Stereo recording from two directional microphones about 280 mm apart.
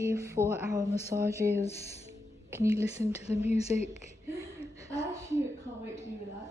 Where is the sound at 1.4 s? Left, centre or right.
Right.